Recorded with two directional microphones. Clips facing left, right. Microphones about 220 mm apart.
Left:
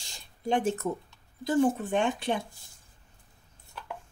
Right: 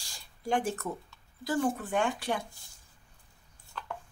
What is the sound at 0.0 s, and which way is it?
Speech, 20° left (ahead or behind).